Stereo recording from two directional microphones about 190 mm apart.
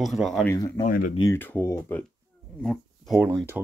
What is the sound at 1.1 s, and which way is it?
Speech, 15° left (ahead or behind).